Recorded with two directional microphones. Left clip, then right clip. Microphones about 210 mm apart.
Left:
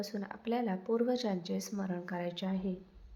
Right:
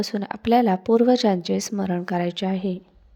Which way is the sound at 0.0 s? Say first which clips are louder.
Right 13 dB; 40° right (ahead or behind).